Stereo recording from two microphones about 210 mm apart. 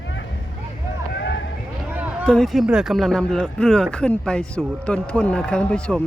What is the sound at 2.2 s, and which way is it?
A man's voice, 5° left (ahead or behind).